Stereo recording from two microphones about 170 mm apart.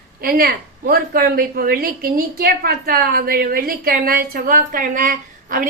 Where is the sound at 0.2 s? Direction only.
60° right (ahead or behind).